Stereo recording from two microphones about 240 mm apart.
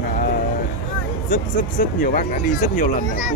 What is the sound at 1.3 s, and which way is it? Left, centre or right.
Speech, left.